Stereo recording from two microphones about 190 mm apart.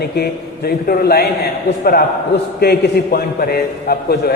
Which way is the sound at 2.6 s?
55° left (ahead or behind).